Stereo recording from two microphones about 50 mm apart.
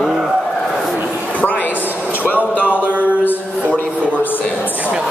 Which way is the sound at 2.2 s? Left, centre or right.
Left.